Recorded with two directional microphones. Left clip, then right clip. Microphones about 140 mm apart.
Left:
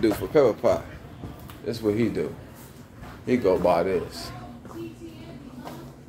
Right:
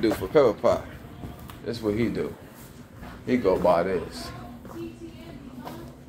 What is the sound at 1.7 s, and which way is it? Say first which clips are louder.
Speech: left 2 dB; 40° left (ahead or behind).